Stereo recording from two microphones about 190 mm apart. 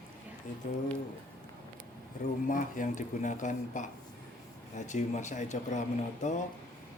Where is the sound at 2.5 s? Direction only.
45° left (ahead or behind).